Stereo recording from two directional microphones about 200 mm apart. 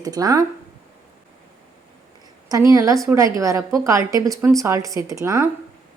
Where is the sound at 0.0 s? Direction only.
20° right (ahead or behind).